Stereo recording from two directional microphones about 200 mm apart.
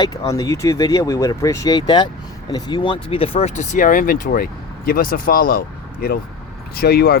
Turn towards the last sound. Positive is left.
turn(degrees=50)  # may be behind; listen again after turning